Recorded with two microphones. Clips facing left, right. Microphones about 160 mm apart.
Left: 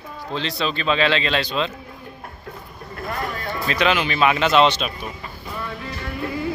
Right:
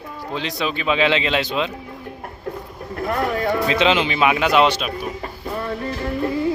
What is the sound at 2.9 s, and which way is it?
Vehicle, 60° right (ahead or behind).